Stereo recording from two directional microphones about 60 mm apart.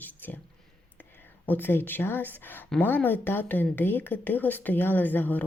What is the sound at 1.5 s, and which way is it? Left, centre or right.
A woman's voice, left.